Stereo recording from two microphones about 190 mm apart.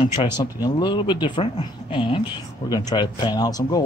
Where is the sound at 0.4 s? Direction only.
20° left (ahead or behind).